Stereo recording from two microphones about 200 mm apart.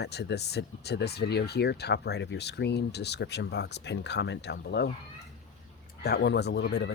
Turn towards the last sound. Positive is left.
turn(degrees=55)  # may be behind; listen again after turning